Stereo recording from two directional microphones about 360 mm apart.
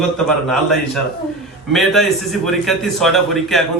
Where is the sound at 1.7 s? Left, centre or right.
Centre.